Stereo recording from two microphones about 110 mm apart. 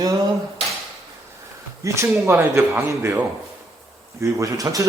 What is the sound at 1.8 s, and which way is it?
Speech, 30° right (ahead or behind).